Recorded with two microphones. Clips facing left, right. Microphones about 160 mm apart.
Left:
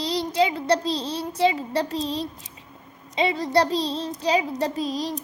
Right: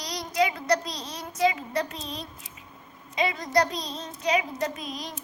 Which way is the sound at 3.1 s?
30° left (ahead or behind).